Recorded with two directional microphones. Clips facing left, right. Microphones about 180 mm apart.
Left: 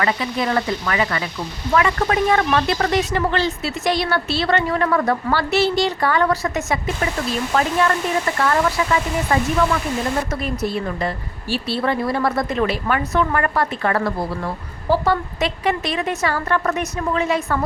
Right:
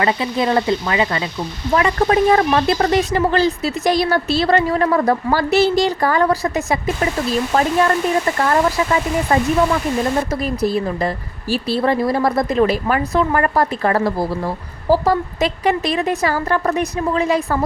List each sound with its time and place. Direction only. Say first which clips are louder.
0.0 s speech: right 3 dB; 30° right (ahead or behind)